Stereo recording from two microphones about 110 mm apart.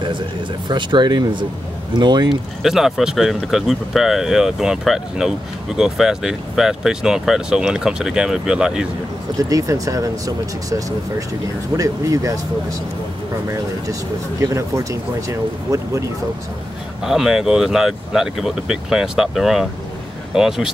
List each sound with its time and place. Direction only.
0.7 s speech: 45° right (ahead or behind)
2.6 s speech: 5° right (ahead or behind)
9.4 s speech: 30° right (ahead or behind)
14.4 s speech: 30° right (ahead or behind)
17.0 s speech: 5° right (ahead or behind)